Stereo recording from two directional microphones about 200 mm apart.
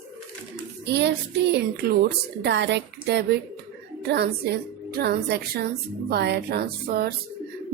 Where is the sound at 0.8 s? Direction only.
60° right (ahead or behind).